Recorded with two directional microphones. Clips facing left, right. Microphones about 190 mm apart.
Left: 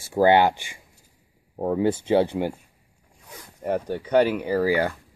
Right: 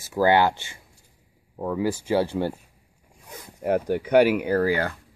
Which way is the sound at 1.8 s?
25° left (ahead or behind).